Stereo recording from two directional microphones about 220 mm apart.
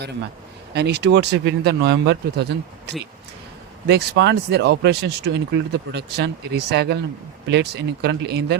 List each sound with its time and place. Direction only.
0.7 s speech: 50° right (ahead or behind)